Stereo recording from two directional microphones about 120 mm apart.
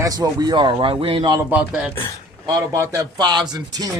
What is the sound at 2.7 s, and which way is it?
Speech, 25° right (ahead or behind).